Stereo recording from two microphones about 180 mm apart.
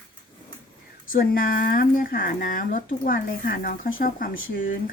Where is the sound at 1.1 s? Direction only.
50° left (ahead or behind).